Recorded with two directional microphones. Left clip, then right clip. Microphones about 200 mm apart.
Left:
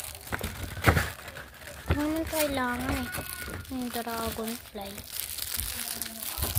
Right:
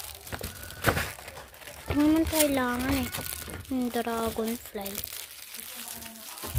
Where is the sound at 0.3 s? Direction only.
5° left (ahead or behind).